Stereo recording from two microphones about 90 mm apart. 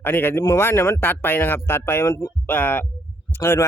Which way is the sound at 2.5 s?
20° left (ahead or behind).